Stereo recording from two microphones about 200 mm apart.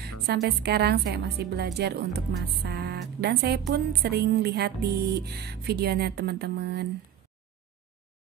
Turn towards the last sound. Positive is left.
turn(degrees=-55)  # may be behind; listen again after turning